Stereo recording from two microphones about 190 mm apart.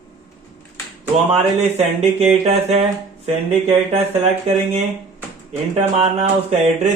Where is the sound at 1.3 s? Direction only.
35° right (ahead or behind).